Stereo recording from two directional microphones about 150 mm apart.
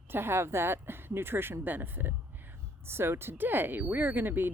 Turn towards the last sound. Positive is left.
turn(degrees=-15)  # may be behind; listen again after turning